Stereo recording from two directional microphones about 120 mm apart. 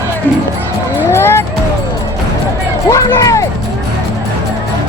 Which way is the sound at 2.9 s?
25° left (ahead or behind).